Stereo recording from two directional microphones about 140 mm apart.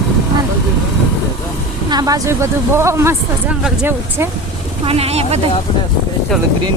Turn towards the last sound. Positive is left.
turn(degrees=-45)  # may be behind; listen again after turning